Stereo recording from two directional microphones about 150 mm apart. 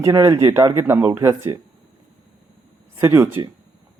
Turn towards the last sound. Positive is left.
turn(degrees=-15)  # may be behind; listen again after turning